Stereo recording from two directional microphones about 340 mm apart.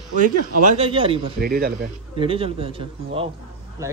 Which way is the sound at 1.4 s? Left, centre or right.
Right.